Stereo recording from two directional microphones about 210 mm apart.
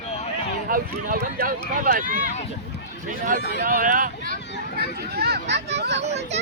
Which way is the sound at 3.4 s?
55° left (ahead or behind).